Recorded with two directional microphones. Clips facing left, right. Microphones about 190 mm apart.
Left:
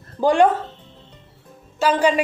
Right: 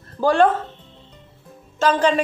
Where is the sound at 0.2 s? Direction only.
15° left (ahead or behind).